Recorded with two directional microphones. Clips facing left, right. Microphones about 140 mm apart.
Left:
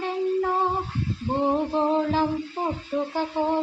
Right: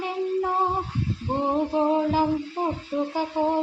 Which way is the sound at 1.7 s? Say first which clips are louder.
Right 1 dB; 10° right (ahead or behind).